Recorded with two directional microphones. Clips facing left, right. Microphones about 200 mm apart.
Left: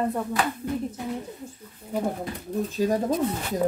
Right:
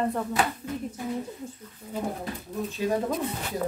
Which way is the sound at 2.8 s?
40° left (ahead or behind).